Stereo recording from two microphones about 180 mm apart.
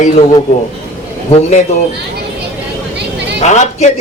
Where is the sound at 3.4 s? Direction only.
40° left (ahead or behind).